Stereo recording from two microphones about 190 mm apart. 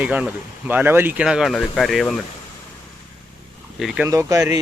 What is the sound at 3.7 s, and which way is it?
Speech, 5° right (ahead or behind).